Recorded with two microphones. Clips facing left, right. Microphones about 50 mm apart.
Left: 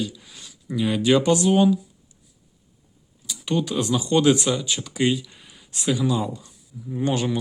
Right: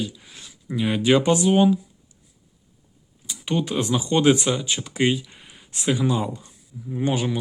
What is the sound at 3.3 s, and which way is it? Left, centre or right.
Speech, right.